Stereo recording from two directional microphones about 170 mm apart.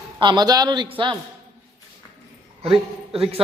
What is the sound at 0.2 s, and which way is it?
Speech, 25° right (ahead or behind).